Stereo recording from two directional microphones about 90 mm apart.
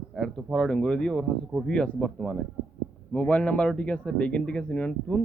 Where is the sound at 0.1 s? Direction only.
Centre (ahead or behind).